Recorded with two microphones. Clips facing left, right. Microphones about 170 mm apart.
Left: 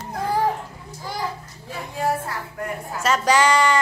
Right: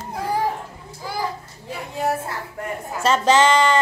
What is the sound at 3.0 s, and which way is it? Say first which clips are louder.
Speech: right 2 dB; 25° right (ahead or behind).